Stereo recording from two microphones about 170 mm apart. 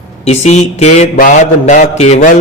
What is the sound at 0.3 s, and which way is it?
Speech, 40° left (ahead or behind).